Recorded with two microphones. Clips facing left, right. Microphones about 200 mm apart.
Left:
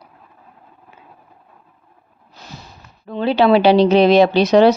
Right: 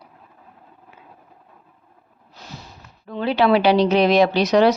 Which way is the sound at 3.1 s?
30° left (ahead or behind).